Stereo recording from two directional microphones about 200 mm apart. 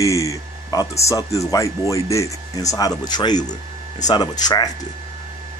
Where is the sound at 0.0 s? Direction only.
15° left (ahead or behind).